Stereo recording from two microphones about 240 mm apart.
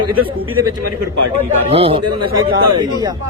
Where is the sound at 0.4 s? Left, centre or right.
Right.